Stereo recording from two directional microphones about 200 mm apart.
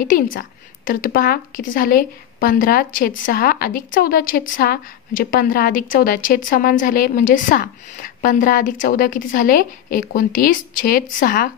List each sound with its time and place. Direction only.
0.1 s a woman's voice: 45° left (ahead or behind)